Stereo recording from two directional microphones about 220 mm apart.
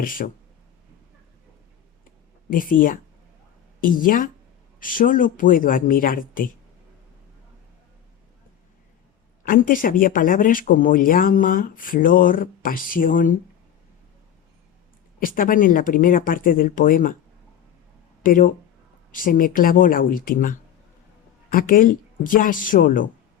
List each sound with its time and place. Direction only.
0.0 s speech: 40° left (ahead or behind)
2.5 s speech: 40° left (ahead or behind)
9.4 s speech: 40° left (ahead or behind)
15.2 s speech: 40° left (ahead or behind)
18.2 s speech: 40° left (ahead or behind)